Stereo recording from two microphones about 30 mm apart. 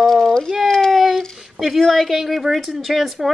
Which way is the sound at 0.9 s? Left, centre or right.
Centre.